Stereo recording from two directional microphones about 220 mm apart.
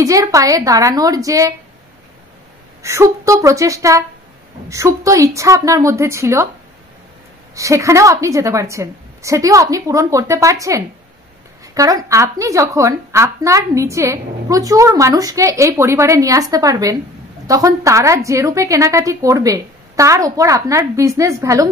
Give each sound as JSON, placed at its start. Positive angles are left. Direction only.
{"t": 0.0, "sound": "a woman's voice", "side_deg": -15}
{"t": 2.8, "sound": "a woman's voice", "side_deg": -15}
{"t": 7.5, "sound": "a woman's voice", "side_deg": -15}